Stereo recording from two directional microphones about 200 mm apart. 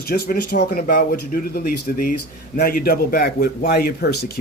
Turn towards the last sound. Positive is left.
turn(degrees=50)  # may be behind; listen again after turning